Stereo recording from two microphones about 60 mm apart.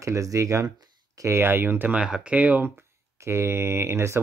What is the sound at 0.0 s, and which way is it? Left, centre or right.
Speech, right.